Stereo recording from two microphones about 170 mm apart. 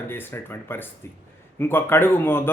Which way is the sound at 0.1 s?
15° left (ahead or behind).